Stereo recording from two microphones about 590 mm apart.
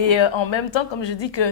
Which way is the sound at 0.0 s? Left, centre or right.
Left.